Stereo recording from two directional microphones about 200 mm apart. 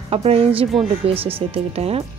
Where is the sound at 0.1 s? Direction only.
30° right (ahead or behind).